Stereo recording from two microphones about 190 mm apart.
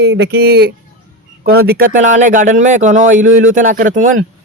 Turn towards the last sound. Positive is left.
turn(degrees=-45)  # may be behind; listen again after turning